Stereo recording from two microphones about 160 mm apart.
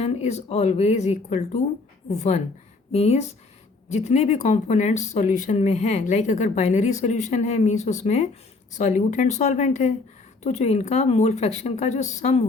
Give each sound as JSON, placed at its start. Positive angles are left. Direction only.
{"t": 0.0, "sound": "speech", "side_deg": 45}